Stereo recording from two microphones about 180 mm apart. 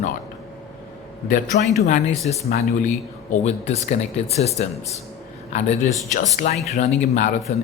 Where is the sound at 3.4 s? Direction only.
40° left (ahead or behind).